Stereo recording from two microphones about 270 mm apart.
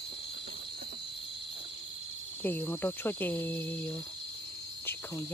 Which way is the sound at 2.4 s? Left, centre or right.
Centre.